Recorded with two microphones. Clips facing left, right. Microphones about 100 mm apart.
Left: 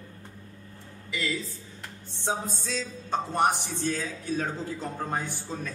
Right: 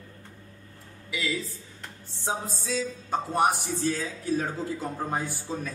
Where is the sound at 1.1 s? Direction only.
Centre (ahead or behind).